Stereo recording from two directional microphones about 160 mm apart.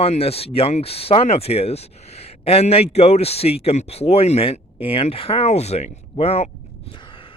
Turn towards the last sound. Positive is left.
turn(degrees=40)  # may be behind; listen again after turning